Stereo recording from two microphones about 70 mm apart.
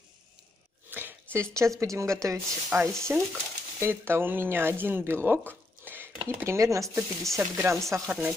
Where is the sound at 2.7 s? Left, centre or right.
Right.